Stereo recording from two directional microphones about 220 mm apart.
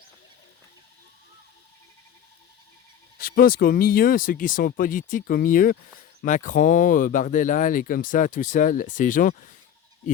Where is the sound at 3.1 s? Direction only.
40° left (ahead or behind).